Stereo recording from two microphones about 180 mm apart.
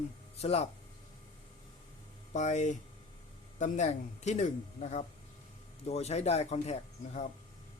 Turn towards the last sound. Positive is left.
turn(degrees=40)  # may be behind; listen again after turning